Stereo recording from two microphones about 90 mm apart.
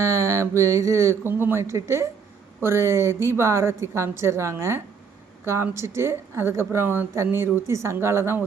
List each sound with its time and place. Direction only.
0.0 s mantra: 30° right (ahead or behind)
1.2 s a woman's voice: 20° right (ahead or behind)